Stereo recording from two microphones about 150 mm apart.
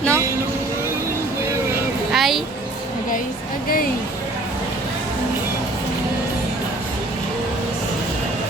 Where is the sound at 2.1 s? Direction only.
Centre (ahead or behind).